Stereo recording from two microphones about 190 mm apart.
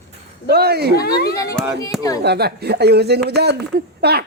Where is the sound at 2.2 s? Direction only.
60° right (ahead or behind).